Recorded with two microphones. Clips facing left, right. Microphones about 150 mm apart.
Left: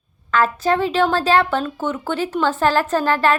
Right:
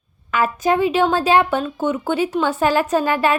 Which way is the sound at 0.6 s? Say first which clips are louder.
Right 5 dB; 15° right (ahead or behind).